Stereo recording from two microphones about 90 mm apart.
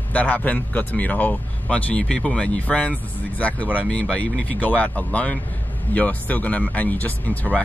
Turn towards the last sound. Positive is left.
turn(degrees=20)  # may be behind; listen again after turning